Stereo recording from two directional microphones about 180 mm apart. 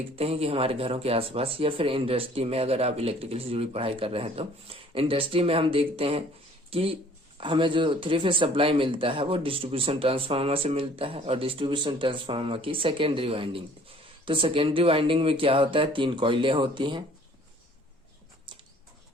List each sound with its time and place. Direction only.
0.2 s speech: 35° right (ahead or behind)